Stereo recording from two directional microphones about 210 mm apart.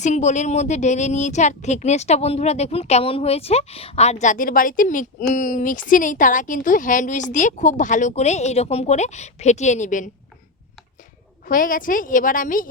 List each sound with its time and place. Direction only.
0.0 s a woman's voice: 35° left (ahead or behind)
11.4 s a woman's voice: 40° left (ahead or behind)